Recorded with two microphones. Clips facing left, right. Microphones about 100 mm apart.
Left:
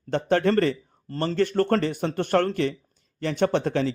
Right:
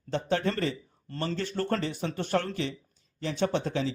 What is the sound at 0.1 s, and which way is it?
Speech, 60° left (ahead or behind).